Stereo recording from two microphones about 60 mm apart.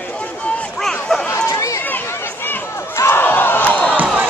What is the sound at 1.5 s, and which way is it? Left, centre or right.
Run, left.